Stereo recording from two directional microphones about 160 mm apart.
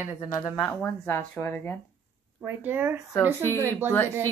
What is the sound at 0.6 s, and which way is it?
Speech, 10° left (ahead or behind).